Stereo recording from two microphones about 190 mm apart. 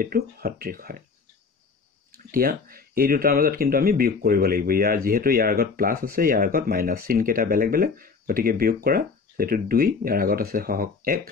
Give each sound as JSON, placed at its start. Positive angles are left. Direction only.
{"t": 0.0, "sound": "speech", "side_deg": -55}
{"t": 2.1, "sound": "speech", "side_deg": -50}